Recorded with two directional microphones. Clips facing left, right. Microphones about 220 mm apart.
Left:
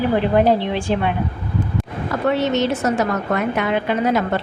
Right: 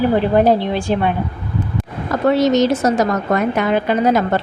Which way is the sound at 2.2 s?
40° right (ahead or behind).